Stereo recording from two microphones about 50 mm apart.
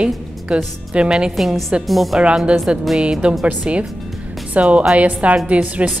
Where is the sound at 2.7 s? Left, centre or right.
Right.